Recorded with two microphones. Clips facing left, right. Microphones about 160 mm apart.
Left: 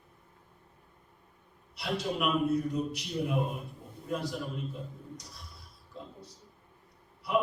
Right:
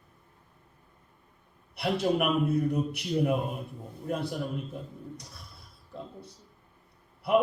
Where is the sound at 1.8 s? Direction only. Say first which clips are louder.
Right 6 dB; 55° right (ahead or behind).